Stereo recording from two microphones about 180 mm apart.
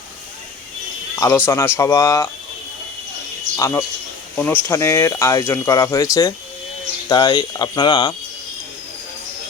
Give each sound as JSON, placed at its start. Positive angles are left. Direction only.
{"t": 1.1, "sound": "a sound", "side_deg": 20}
{"t": 1.5, "sound": "speech", "side_deg": 15}
{"t": 3.6, "sound": "speech", "side_deg": 15}